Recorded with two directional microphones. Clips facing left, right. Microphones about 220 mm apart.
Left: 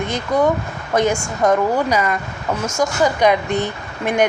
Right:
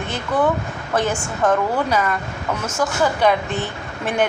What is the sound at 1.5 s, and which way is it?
Speech, 10° left (ahead or behind).